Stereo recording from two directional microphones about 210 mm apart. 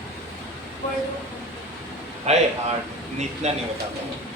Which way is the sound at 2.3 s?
30° right (ahead or behind).